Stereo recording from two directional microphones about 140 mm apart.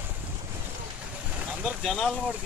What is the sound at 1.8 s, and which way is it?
Vehicle, 5° left (ahead or behind).